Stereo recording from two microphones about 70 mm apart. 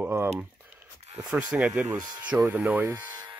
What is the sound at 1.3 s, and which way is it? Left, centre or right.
Speech, centre.